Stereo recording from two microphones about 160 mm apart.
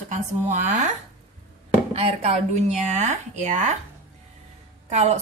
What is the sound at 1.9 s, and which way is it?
Speech, 40° right (ahead or behind).